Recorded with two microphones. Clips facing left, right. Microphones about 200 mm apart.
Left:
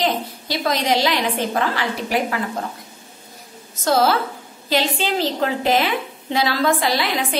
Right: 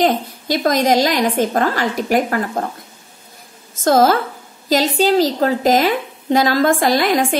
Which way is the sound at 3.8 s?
45° right (ahead or behind).